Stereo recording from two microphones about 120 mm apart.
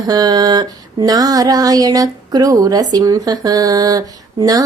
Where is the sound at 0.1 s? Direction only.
35° right (ahead or behind).